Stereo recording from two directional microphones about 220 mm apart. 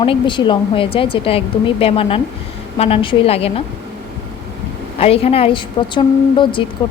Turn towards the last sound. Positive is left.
turn(degrees=20)  # may be behind; listen again after turning